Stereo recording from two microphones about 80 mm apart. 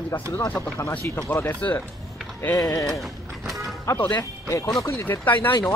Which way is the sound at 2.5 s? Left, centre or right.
Left.